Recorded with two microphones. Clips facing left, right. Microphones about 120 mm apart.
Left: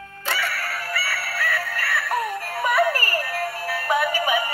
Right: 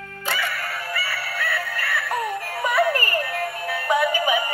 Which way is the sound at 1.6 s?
Centre (ahead or behind).